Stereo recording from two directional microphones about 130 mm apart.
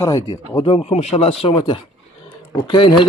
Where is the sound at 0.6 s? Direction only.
50° left (ahead or behind).